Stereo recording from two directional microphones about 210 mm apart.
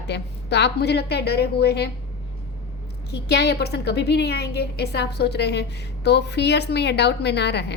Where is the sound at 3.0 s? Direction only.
55° left (ahead or behind).